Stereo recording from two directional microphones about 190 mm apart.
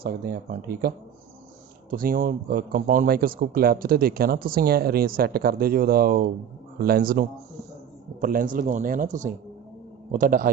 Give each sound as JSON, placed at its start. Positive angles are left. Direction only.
{"t": 0.0, "sound": "speech", "side_deg": -50}